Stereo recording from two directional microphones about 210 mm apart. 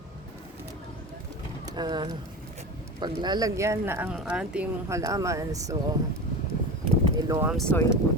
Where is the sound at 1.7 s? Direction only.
20° right (ahead or behind).